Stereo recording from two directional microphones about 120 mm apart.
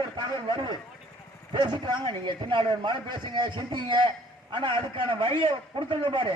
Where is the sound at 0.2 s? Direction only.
40° right (ahead or behind).